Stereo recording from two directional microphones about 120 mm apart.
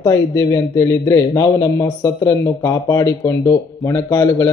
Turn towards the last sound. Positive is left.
turn(degrees=20)  # may be behind; listen again after turning